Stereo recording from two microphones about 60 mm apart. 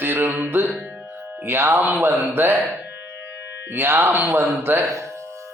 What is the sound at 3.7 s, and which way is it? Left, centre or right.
Speech, right.